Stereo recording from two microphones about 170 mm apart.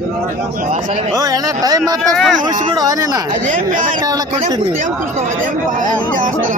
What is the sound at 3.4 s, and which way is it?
Speech, 50° right (ahead or behind).